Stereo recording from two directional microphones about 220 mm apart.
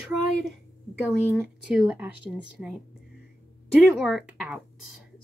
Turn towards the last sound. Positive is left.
turn(degrees=-5)  # may be behind; listen again after turning